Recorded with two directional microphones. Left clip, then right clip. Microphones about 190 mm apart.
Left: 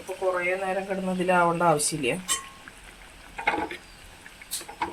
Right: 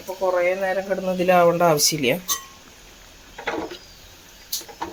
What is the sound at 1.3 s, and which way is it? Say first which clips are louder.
Speech: right 5 dB; 50° right (ahead or behind).